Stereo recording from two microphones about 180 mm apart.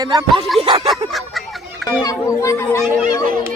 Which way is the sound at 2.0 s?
20° left (ahead or behind).